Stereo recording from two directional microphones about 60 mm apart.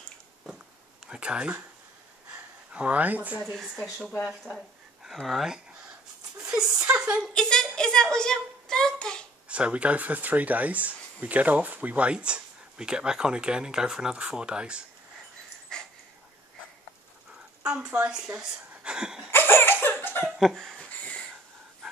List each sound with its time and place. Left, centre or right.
1.0 s speech: centre
2.7 s speech: right
4.2 s speech: centre
6.4 s a sound: centre
7.3 s a child's voice: centre
9.5 s speech: centre
15.7 s dog: centre
18.4 s speech: centre
19.3 s laughter: left
20.3 s laughter: centre
21.0 s a sound: centre